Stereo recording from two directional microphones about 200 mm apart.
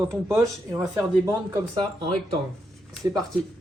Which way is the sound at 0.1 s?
15° right (ahead or behind).